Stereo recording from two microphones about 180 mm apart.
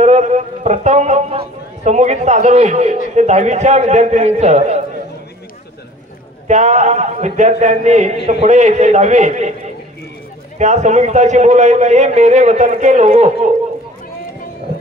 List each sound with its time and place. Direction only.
0.0 s a sound: 40° right (ahead or behind)
3.2 s a man's voice: 40° right (ahead or behind)
6.4 s a man's voice: 40° right (ahead or behind)
10.6 s a man's voice: 40° right (ahead or behind)